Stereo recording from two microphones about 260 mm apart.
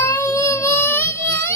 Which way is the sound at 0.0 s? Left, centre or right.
Centre.